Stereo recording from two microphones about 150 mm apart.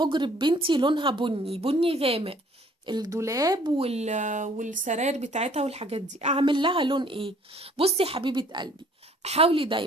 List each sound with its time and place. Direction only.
0.0 s a woman's voice: 30° right (ahead or behind)
2.8 s speech: 30° right (ahead or behind); by 6.3 s 45° right (ahead or behind)
6.3 s a woman's voice: 35° right (ahead or behind)
9.2 s a woman's voice: 40° right (ahead or behind)